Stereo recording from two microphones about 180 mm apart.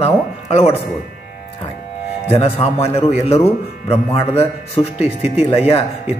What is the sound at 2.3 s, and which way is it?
Speech, 35° left (ahead or behind).